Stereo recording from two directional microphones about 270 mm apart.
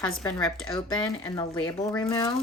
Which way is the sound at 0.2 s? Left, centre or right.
Centre.